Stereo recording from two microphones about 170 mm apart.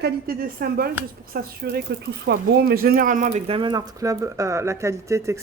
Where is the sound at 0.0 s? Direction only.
60° right (ahead or behind).